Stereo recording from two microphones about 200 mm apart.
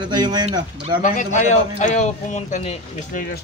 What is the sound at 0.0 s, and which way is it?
Speech, 20° right (ahead or behind).